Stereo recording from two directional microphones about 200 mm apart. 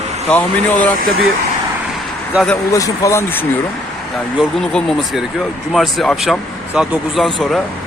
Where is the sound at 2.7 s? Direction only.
15° left (ahead or behind).